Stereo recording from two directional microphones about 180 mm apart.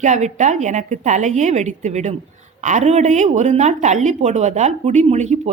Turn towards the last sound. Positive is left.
turn(degrees=-40)  # may be behind; listen again after turning